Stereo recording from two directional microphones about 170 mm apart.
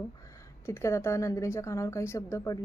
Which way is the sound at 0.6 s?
15° left (ahead or behind).